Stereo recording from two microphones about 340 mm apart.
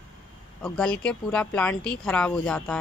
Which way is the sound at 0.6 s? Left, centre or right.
Centre.